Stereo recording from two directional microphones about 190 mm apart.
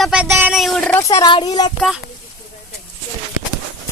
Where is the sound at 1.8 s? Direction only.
Centre (ahead or behind).